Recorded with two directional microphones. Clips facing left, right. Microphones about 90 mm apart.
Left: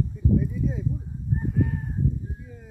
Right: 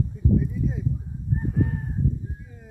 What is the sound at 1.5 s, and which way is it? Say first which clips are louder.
Chicken: even; 30° right (ahead or behind).